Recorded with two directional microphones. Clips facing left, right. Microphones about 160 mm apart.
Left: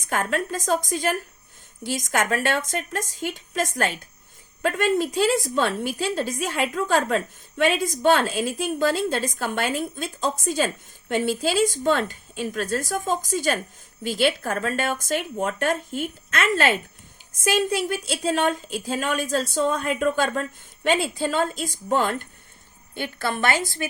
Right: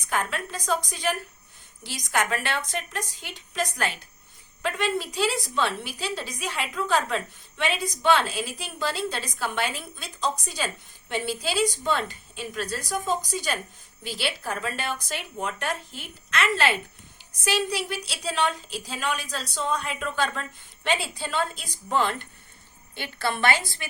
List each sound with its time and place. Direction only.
0.0 s a woman's voice: 45° left (ahead or behind)